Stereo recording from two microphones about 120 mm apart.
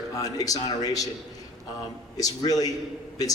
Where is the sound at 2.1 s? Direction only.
30° left (ahead or behind).